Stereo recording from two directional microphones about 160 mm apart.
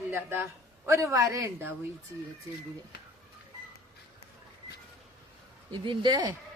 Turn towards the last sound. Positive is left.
turn(degrees=-25)  # may be behind; listen again after turning